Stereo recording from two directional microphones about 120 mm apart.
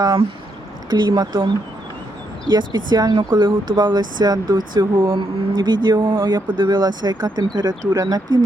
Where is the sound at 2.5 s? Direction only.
35° right (ahead or behind).